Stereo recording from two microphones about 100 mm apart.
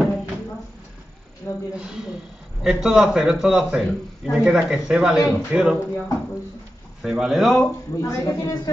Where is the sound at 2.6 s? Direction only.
5° right (ahead or behind).